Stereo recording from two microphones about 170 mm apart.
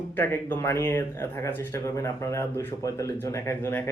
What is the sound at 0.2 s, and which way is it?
Speech, 15° left (ahead or behind).